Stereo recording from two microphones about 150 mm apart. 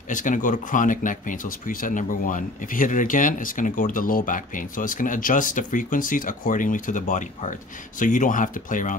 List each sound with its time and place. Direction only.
0.1 s speech: 60° left (ahead or behind)